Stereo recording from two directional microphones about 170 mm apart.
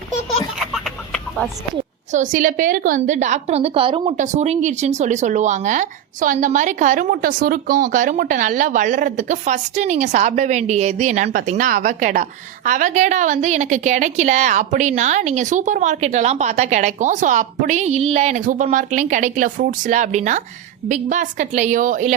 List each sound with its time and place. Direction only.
0.6 s chicken: centre (ahead or behind)
2.1 s a woman's voice: 50° right (ahead or behind); by 4.1 s 30° right (ahead or behind)
4.2 s a woman's voice: 45° right (ahead or behind)